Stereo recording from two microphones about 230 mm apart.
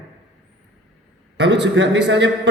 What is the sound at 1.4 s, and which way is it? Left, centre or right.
A man's voice, right.